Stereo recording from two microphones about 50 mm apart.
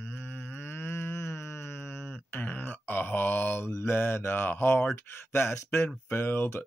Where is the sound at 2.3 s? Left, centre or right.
Left.